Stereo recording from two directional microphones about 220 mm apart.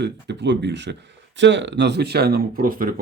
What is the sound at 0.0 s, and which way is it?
A man's voice, 50° right (ahead or behind).